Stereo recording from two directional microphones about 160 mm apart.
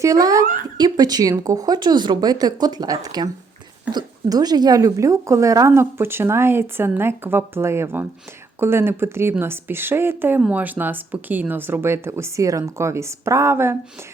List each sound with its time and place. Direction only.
0.0 s a woman's voice: 20° right (ahead or behind)